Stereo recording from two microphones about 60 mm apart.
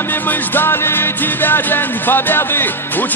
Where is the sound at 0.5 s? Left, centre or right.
Left.